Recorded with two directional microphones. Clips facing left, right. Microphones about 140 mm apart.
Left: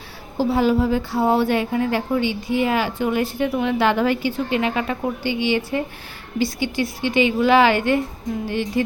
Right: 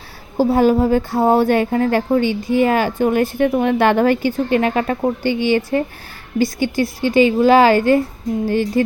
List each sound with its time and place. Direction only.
0.3 s a woman's voice: 45° right (ahead or behind)